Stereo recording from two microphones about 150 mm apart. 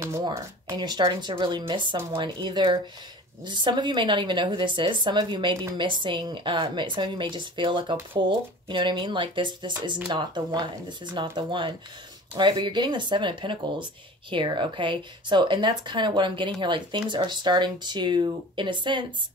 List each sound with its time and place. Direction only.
0.3 s a woman's voice: 25° right (ahead or behind)